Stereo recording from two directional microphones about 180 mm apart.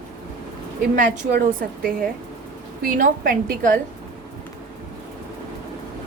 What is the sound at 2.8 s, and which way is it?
Speech, 50° right (ahead or behind).